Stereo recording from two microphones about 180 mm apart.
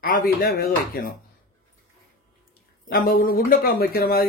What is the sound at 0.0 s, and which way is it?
Speech, 55° left (ahead or behind).